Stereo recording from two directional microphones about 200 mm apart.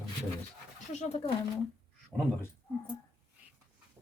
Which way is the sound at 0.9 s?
35° left (ahead or behind).